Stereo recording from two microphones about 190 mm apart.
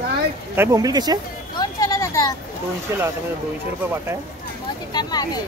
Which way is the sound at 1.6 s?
20° left (ahead or behind).